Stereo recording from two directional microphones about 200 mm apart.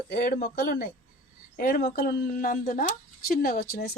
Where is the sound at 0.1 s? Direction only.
50° left (ahead or behind).